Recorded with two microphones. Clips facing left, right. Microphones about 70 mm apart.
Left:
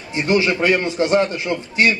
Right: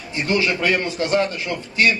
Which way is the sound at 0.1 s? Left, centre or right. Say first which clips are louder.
Left 3 dB; left.